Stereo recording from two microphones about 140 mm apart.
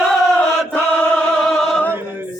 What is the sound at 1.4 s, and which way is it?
Music, 5° left (ahead or behind).